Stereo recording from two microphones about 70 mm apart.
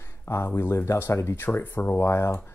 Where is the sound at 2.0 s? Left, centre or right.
Left.